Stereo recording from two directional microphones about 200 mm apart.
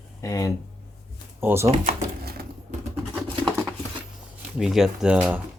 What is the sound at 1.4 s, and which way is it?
Speech, 10° right (ahead or behind).